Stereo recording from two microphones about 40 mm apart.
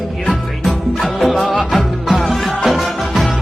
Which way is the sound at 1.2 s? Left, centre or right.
Centre.